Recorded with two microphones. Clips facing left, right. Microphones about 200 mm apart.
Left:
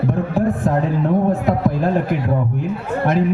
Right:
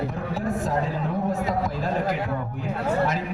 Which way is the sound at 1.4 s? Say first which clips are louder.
Left 8 dB; 55° left (ahead or behind).